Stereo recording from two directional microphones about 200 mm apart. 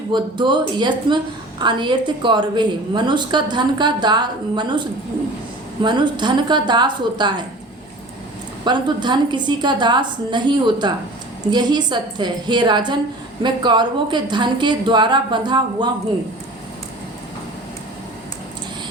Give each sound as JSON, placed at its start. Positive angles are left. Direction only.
{"t": 0.1, "sound": "a woman's voice", "side_deg": -25}
{"t": 8.6, "sound": "a woman's voice", "side_deg": -20}